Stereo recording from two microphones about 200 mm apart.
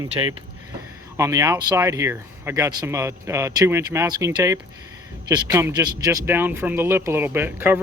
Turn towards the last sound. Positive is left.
turn(degrees=-10)  # may be behind; listen again after turning